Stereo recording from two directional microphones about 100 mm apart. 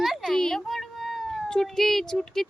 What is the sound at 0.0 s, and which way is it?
A woman's voice, centre (ahead or behind).